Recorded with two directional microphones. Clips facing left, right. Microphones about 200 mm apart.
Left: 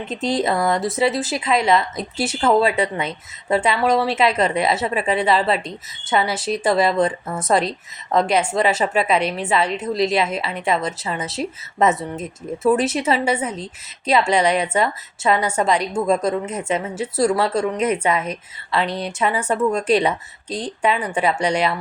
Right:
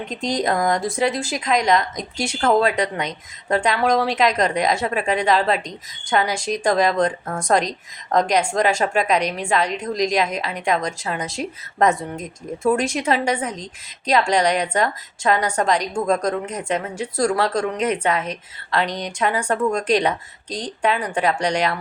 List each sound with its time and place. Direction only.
0.3 s a woman's voice: 5° left (ahead or behind)